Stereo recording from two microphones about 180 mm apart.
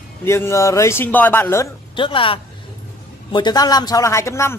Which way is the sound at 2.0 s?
30° left (ahead or behind).